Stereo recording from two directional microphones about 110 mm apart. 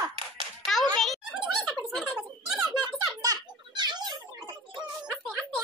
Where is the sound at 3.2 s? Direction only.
45° right (ahead or behind).